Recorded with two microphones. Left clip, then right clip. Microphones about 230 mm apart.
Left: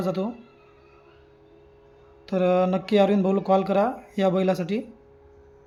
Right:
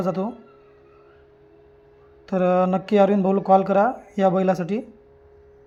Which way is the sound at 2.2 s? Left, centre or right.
Centre.